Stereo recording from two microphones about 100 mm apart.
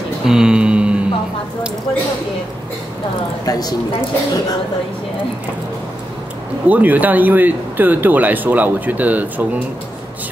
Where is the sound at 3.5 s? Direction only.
40° left (ahead or behind).